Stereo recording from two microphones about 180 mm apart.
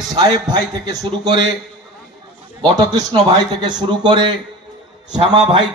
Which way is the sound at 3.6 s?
25° right (ahead or behind).